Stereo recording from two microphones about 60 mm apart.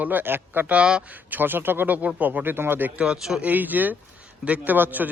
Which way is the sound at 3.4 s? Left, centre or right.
Right.